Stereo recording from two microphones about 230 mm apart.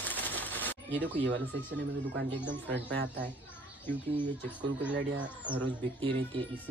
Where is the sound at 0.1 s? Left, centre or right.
Centre.